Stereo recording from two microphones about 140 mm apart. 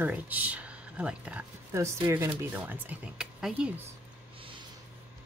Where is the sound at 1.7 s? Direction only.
20° right (ahead or behind).